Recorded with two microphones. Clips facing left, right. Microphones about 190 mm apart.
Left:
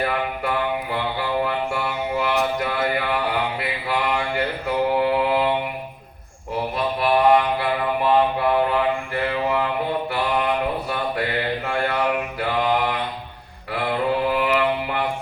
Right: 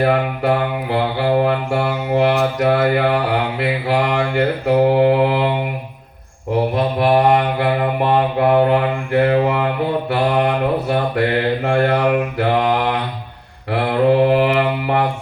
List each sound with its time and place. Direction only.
0.0 s mantra: 65° right (ahead or behind)
6.7 s mantra: 55° right (ahead or behind)